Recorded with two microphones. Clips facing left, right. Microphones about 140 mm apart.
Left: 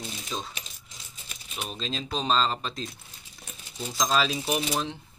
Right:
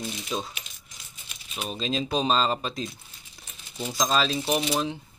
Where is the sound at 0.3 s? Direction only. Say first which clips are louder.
Right 3 dB; 10° right (ahead or behind).